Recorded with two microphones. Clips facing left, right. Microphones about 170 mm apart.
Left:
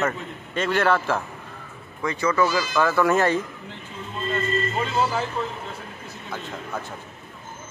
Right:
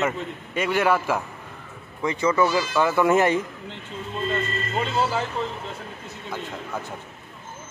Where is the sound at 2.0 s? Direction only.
20° right (ahead or behind).